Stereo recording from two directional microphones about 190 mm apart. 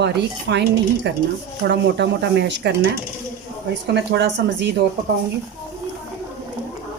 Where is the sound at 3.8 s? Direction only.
60° right (ahead or behind).